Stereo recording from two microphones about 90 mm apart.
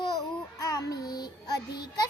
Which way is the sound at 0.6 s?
35° left (ahead or behind).